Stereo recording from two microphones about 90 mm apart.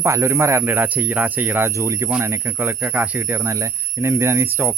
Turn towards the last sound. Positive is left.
turn(degrees=-25)  # may be behind; listen again after turning